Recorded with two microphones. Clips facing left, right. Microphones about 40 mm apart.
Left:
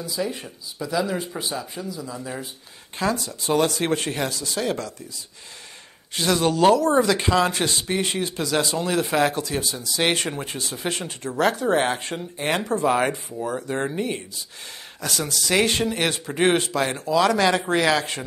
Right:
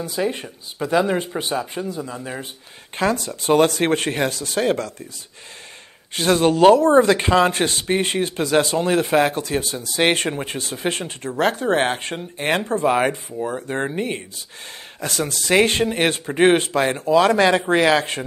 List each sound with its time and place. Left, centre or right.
0.0 s speech: right
6.1 s speech: right
12.8 s speech: right